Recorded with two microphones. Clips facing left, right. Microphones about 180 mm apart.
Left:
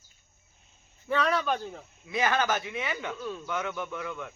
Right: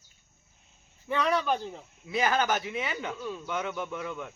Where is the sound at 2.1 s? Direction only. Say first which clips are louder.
Even; 30° right (ahead or behind).